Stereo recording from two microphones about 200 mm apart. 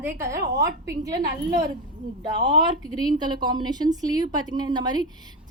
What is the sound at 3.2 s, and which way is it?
A woman's voice, 20° right (ahead or behind).